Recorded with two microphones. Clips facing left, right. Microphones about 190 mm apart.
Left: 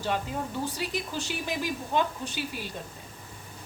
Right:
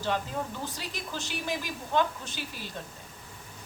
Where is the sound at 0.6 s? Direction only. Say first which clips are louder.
Left 6 dB; 15° left (ahead or behind).